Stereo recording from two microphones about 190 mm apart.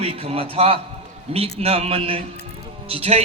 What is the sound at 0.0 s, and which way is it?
A man's voice, 30° right (ahead or behind).